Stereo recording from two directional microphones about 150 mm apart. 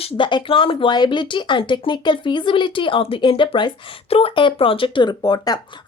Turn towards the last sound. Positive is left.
turn(degrees=30)  # may be behind; listen again after turning